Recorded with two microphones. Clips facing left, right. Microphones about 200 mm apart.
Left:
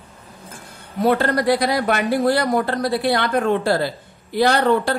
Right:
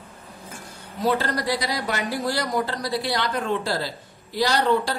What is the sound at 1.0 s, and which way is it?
Speech, 60° left (ahead or behind).